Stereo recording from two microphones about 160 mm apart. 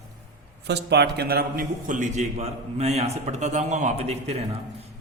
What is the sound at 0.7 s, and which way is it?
A man's voice, 90° right.